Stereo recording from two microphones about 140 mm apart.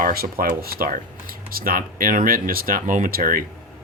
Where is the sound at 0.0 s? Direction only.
90° right.